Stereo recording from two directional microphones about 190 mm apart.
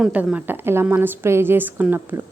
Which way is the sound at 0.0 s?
5° right (ahead or behind).